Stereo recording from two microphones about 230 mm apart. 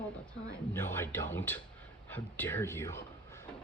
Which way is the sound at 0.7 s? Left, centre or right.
Centre.